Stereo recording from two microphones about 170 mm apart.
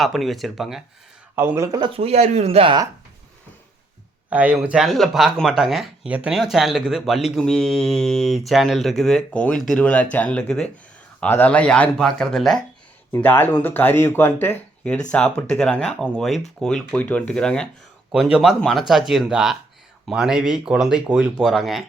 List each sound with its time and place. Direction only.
0.0 s speech: centre (ahead or behind)
1.4 s speech: 15° right (ahead or behind); by 2.7 s 35° right (ahead or behind)
4.3 s speech: 10° right (ahead or behind)